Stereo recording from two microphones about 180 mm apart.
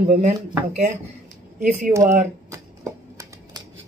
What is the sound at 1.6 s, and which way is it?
Speech, 45° right (ahead or behind).